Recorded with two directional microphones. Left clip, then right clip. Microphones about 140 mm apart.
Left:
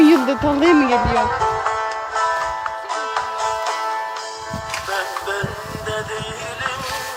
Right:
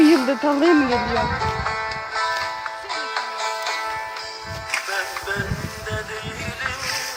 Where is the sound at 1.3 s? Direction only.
40° left (ahead or behind).